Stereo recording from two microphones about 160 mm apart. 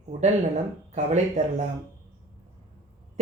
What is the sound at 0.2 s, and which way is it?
Speech, 45° right (ahead or behind).